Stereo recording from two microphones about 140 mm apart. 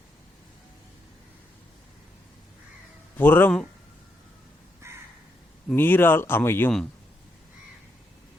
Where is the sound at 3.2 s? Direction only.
15° left (ahead or behind).